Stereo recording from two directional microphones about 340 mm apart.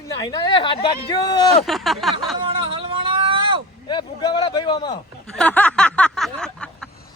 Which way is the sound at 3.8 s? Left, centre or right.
Centre.